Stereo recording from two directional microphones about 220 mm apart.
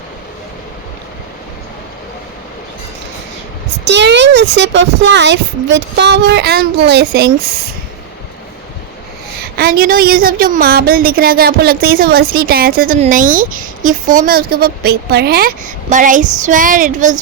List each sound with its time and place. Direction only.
3.8 s a woman's voice: 50° right (ahead or behind)
9.6 s a woman's voice: 45° right (ahead or behind)